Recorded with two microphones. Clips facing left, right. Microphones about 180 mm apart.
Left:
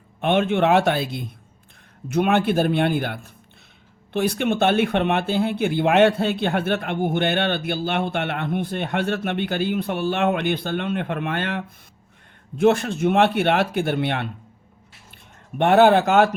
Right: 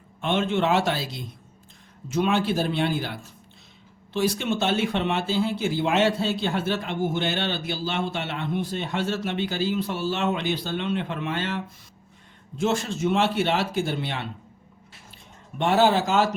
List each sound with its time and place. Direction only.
0.2 s speech: 60° left (ahead or behind)